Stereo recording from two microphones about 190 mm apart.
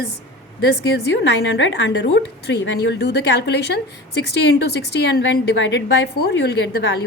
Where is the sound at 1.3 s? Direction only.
65° left (ahead or behind).